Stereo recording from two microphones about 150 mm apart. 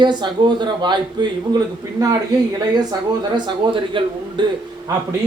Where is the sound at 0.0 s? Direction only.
30° right (ahead or behind).